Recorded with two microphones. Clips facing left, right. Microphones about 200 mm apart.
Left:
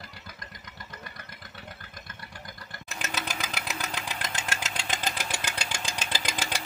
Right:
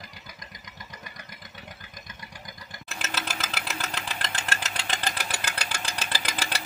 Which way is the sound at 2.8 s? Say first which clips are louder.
Even; centre (ahead or behind).